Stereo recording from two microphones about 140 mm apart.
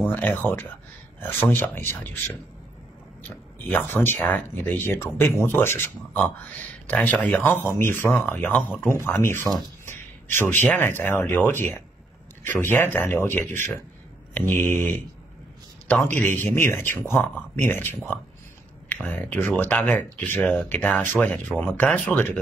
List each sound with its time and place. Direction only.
0.0 s speech: 15° left (ahead or behind)
3.5 s speech: 10° left (ahead or behind)
16.2 s speech: 15° left (ahead or behind)